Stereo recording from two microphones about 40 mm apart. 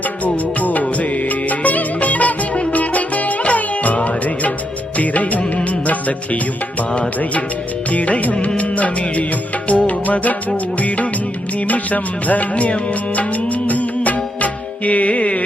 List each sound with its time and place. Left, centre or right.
0.6 s music: left
4.9 s music of bollywood: left
5.8 s music: left
7.9 s music: left